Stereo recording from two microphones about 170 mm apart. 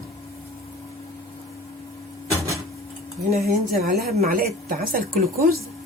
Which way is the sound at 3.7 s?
65° right (ahead or behind).